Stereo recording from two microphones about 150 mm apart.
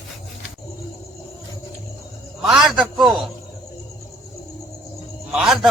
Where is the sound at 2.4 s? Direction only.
5° right (ahead or behind).